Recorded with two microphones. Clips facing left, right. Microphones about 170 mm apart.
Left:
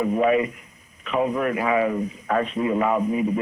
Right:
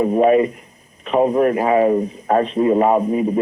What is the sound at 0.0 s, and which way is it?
A man's voice, 35° right (ahead or behind).